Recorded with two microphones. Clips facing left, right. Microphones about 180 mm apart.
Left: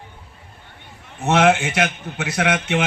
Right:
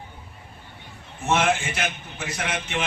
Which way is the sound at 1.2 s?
75° left (ahead or behind).